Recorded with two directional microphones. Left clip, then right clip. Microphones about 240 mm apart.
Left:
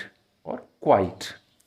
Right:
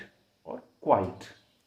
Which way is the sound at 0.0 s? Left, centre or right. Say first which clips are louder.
Left 8 dB; left.